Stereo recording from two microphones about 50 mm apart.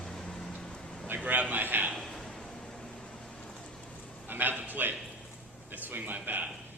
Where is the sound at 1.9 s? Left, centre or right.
Centre.